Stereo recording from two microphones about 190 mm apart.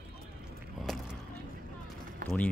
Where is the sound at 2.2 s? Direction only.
45° right (ahead or behind).